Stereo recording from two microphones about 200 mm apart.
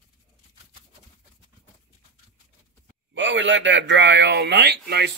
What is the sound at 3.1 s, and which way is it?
Speech, 65° right (ahead or behind).